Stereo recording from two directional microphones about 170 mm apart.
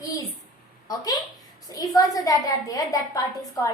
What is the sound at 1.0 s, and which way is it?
A woman's voice, 25° left (ahead or behind).